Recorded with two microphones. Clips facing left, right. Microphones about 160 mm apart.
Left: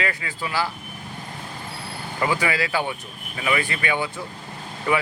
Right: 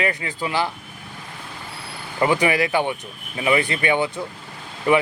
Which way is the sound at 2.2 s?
20° right (ahead or behind).